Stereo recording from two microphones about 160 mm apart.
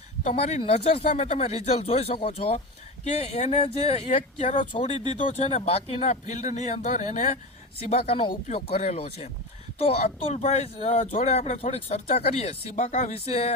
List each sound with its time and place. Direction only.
0.3 s speech: 40° left (ahead or behind)
10.3 s speech: 45° left (ahead or behind)